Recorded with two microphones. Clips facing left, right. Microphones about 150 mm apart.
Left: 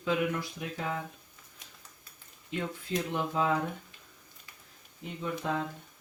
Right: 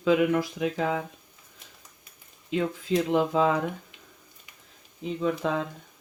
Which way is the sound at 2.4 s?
90° right.